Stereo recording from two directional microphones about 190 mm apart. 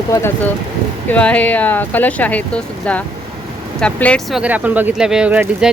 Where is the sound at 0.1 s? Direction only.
10° left (ahead or behind).